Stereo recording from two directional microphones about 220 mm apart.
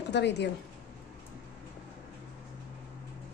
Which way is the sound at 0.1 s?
50° left (ahead or behind).